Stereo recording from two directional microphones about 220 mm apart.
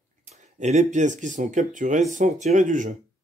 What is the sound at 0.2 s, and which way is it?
Speech, 30° right (ahead or behind).